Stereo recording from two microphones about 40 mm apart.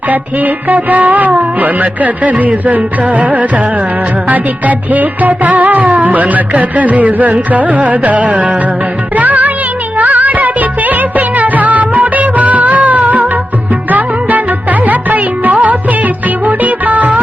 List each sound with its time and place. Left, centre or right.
0.1 s music: right